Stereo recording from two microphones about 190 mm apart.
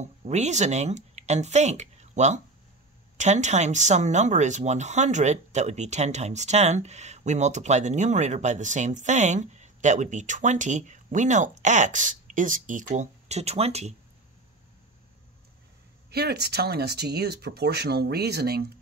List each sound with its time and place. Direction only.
0.0 s speech: 35° right (ahead or behind)
16.1 s speech: 60° right (ahead or behind)